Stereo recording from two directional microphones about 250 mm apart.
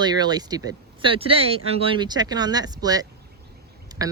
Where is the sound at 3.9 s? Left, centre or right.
Centre.